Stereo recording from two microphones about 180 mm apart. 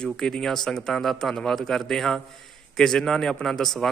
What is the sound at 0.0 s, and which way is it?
Speech, 5° left (ahead or behind).